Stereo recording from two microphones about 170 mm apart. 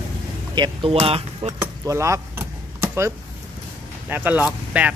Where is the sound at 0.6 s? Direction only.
35° right (ahead or behind).